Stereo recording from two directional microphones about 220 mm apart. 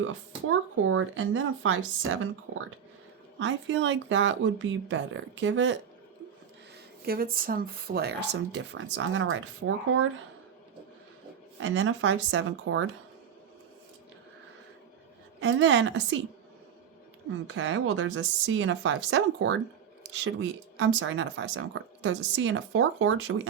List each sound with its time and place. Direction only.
0.0 s a woman's voice: 70° right (ahead or behind)
3.3 s a woman's voice: 55° right (ahead or behind)
7.0 s speech: 45° right (ahead or behind); by 10.1 s 65° right (ahead or behind)
11.6 s a woman's voice: 55° right (ahead or behind)
15.4 s a woman's voice: 55° right (ahead or behind)
17.4 s a woman's voice: 55° right (ahead or behind)
20.7 s a woman's voice: 60° right (ahead or behind)